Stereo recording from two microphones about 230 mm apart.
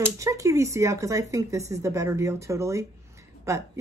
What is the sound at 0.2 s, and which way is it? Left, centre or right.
Speech, centre.